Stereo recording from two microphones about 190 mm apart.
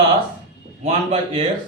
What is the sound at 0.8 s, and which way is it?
Speech, 35° right (ahead or behind).